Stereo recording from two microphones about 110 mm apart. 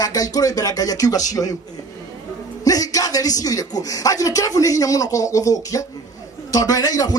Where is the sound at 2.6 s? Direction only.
35° left (ahead or behind).